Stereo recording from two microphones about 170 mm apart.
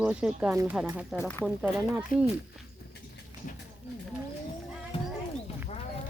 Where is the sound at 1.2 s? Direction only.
10° left (ahead or behind).